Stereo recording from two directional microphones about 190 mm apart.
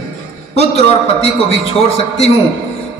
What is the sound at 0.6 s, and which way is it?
Mantra, 35° left (ahead or behind).